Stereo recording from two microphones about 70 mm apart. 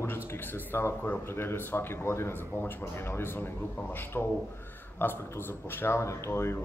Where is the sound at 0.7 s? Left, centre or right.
Left.